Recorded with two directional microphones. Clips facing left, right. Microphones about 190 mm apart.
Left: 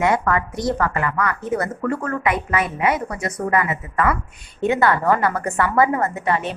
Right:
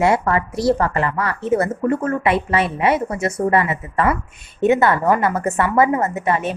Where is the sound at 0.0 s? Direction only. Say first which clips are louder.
Right 2 dB; 30° right (ahead or behind).